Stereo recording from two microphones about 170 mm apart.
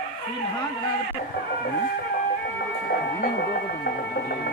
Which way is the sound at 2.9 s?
65° left (ahead or behind).